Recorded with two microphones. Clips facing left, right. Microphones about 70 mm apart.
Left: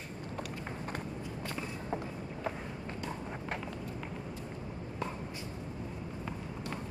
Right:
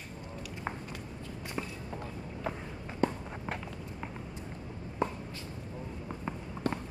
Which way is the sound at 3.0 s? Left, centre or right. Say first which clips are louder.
Right 12 dB; right.